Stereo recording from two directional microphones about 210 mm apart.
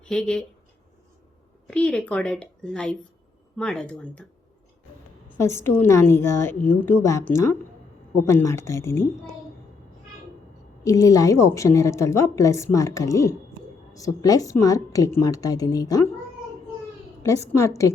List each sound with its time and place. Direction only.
0.0 s speech: 5° left (ahead or behind)
1.6 s a woman's voice: 5° left (ahead or behind)
5.4 s a woman's voice: 15° left (ahead or behind)
10.8 s a woman's voice: 15° left (ahead or behind)
17.2 s a woman's voice: 15° left (ahead or behind)